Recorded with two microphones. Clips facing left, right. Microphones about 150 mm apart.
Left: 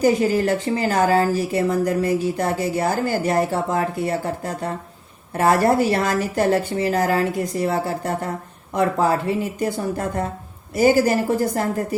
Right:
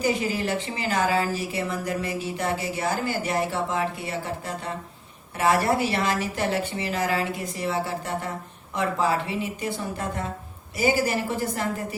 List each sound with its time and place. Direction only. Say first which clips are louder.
0.0 s speech: left 8 dB; 45° left (ahead or behind)